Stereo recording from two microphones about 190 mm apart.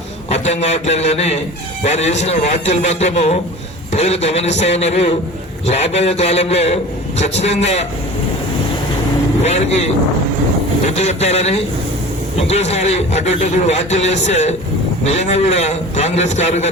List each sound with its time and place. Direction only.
0.3 s a man's voice: 35° left (ahead or behind)
9.4 s a man's voice: 35° left (ahead or behind)